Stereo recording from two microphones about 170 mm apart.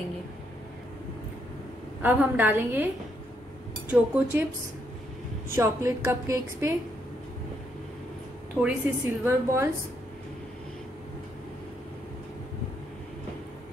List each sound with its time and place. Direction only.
2.0 s a woman's voice: 10° right (ahead or behind)
3.9 s a woman's voice: 10° right (ahead or behind)
5.5 s a woman's voice: 15° right (ahead or behind)
8.5 s a woman's voice: 10° right (ahead or behind)